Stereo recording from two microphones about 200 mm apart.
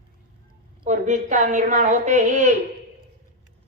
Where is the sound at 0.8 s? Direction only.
40° right (ahead or behind).